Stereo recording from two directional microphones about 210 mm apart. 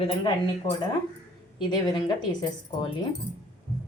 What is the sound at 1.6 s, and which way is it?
A woman's voice, 20° left (ahead or behind).